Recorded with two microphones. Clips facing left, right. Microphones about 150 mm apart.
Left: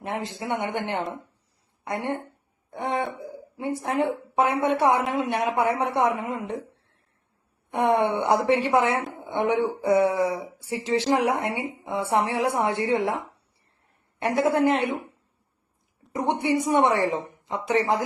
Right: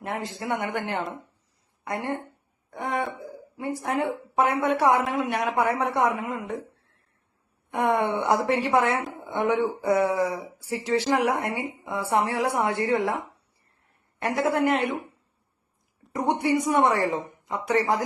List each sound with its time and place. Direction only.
0.0 s a woman's voice: 25° left (ahead or behind)
7.7 s a woman's voice: 30° left (ahead or behind)
9.1 s a sound: 30° left (ahead or behind)
9.8 s a woman's voice: 25° left (ahead or behind)
14.2 s a woman's voice: 25° left (ahead or behind)
14.8 s a woman's voice: centre (ahead or behind)
16.1 s a woman's voice: 25° left (ahead or behind)